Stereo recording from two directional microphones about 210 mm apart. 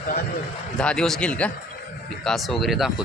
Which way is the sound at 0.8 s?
5° left (ahead or behind).